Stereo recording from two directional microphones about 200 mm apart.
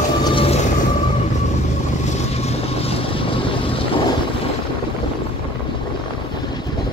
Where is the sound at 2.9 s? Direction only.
25° left (ahead or behind).